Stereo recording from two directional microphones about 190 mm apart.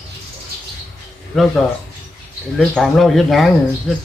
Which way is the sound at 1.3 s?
Centre (ahead or behind).